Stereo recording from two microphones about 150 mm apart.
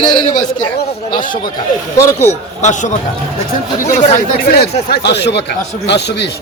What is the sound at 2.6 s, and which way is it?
Speech, 50° left (ahead or behind).